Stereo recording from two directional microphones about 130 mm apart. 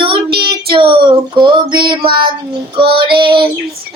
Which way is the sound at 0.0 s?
40° right (ahead or behind).